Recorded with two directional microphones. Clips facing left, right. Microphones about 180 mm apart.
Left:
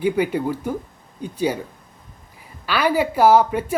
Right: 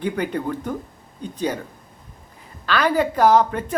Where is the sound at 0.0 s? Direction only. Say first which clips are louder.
Left 4 dB; 10° left (ahead or behind).